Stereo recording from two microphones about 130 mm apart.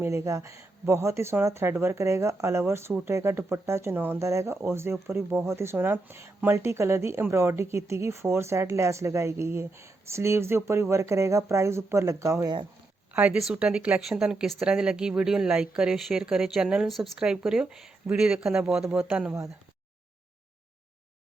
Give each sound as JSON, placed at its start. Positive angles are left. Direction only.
{"t": 0.0, "sound": "speech", "side_deg": -20}
{"t": 13.1, "sound": "speech", "side_deg": -10}